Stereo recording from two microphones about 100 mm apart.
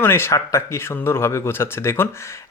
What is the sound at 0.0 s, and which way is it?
Speech, 25° left (ahead or behind).